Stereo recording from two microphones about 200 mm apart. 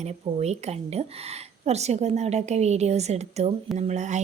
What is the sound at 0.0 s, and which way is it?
Speech, 35° right (ahead or behind).